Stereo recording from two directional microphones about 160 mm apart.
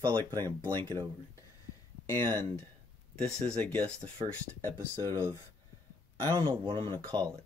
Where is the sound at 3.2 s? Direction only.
5° left (ahead or behind).